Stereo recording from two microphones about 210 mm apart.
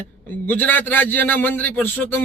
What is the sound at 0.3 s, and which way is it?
A man's voice, 10° left (ahead or behind).